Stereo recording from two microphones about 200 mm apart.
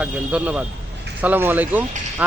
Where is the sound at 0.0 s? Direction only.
5° right (ahead or behind).